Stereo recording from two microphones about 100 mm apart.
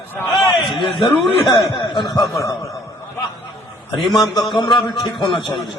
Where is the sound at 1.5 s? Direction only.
50° left (ahead or behind).